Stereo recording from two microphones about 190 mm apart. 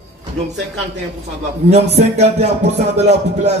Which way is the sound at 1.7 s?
35° right (ahead or behind).